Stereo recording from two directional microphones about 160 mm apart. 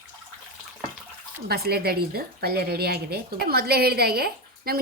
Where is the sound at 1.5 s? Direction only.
80° right.